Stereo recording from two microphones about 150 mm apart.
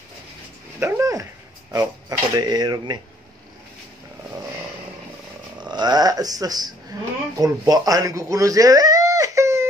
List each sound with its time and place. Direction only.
0.7 s dog: 15° right (ahead or behind)
1.7 s speech: 25° right (ahead or behind)
5.7 s speech: 30° right (ahead or behind)